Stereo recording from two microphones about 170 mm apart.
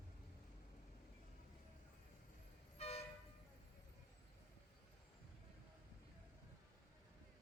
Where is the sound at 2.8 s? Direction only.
40° left (ahead or behind).